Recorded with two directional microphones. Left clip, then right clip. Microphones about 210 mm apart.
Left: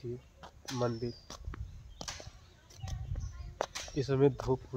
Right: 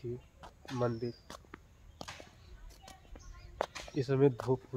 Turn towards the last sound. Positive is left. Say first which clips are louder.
# even
turn(degrees=-5)  # may be behind; listen again after turning